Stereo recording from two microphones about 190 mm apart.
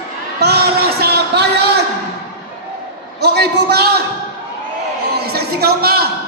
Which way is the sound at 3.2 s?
60° right (ahead or behind).